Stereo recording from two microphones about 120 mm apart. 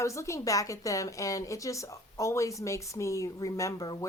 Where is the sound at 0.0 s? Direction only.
25° left (ahead or behind).